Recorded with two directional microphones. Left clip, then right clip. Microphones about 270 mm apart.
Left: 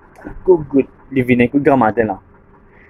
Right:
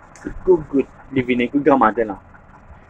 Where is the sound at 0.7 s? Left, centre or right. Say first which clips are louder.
Left 4 dB; centre.